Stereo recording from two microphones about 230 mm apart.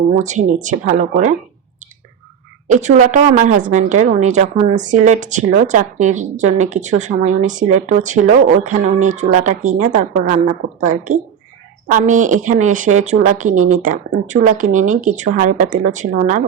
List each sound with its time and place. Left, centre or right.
0.2 s a woman's voice: right
2.6 s a woman's voice: right